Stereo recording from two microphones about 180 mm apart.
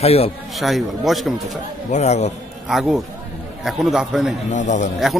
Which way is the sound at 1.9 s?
40° left (ahead or behind).